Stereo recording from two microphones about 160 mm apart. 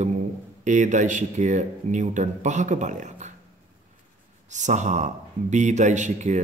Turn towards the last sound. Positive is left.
turn(degrees=-50)  # may be behind; listen again after turning